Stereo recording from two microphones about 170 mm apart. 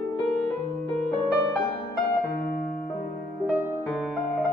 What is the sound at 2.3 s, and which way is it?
Music, 60° left (ahead or behind).